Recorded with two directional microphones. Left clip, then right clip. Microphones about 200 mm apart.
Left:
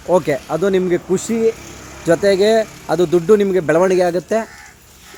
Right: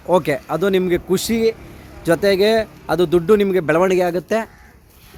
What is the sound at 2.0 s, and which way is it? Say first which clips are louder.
Speech: left 2 dB; 5° right (ahead or behind).